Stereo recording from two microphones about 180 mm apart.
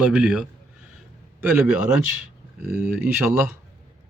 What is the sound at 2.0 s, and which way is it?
Speech, 90° left.